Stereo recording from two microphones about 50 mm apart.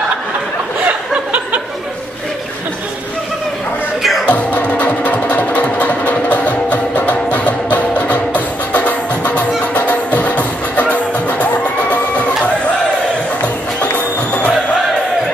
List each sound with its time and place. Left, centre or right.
4.3 s music: left
13.4 s music: left